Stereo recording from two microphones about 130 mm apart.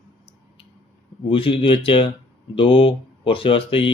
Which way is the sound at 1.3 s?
40° left (ahead or behind).